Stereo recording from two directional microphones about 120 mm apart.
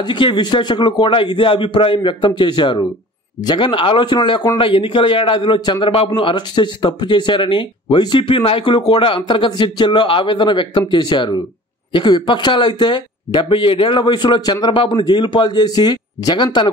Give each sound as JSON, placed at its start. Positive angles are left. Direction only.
{"t": 0.0, "sound": "a man's voice", "side_deg": 40}